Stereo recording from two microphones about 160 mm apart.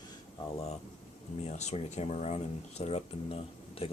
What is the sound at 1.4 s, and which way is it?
Speech, 45° left (ahead or behind).